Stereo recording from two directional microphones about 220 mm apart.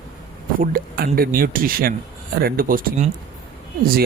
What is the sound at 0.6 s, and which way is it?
Speech, 40° right (ahead or behind).